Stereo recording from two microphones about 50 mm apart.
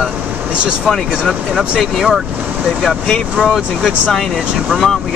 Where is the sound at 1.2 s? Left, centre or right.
Centre.